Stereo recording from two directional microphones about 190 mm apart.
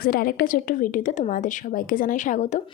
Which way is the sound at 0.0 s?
50° left (ahead or behind).